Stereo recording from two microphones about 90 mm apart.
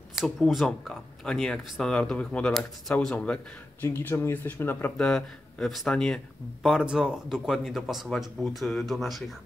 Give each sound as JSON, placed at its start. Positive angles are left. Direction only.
{"t": 0.1, "sound": "speech", "side_deg": -5}
{"t": 3.8, "sound": "speech", "side_deg": 20}
{"t": 4.9, "sound": "speech", "side_deg": 10}
{"t": 6.6, "sound": "speech", "side_deg": -5}